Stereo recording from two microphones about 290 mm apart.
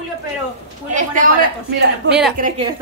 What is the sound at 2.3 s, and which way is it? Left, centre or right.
Speech, right.